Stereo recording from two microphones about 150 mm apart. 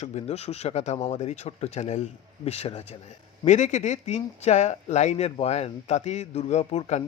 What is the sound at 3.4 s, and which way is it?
Speech, 55° left (ahead or behind).